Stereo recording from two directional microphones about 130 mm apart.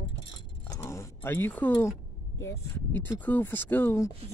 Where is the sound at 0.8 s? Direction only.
20° left (ahead or behind).